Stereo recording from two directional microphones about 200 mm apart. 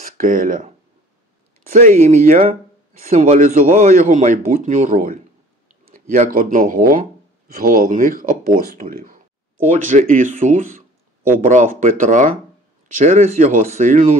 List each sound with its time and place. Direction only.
0.0 s speech: 40° right (ahead or behind)
1.7 s speech: 40° right (ahead or behind)